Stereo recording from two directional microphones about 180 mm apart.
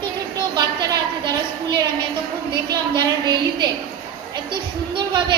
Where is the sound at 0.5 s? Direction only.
20° right (ahead or behind).